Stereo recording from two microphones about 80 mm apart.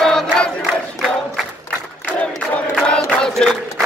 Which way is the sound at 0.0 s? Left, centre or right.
Centre.